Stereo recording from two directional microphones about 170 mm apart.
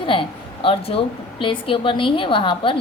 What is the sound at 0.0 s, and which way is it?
A woman's voice, 30° left (ahead or behind).